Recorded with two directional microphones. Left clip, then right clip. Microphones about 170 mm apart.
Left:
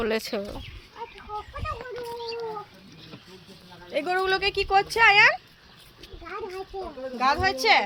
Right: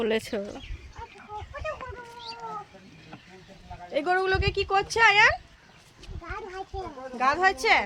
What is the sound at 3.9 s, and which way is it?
Speech, 5° right (ahead or behind).